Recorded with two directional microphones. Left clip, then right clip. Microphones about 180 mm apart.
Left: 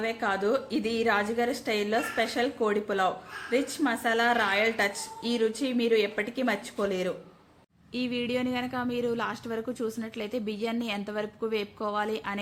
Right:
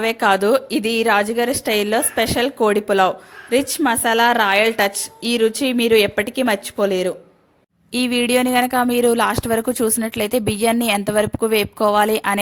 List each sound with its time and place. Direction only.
0.0 s a woman's voice: 60° right (ahead or behind)
7.9 s a woman's voice: 70° right (ahead or behind)